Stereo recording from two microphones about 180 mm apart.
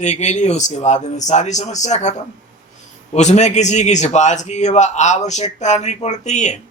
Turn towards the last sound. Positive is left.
turn(degrees=40)  # may be behind; listen again after turning